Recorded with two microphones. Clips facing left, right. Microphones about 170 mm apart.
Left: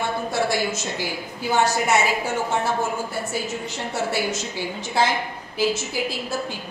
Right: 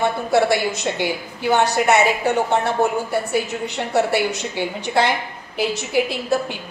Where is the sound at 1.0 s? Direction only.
65° right (ahead or behind).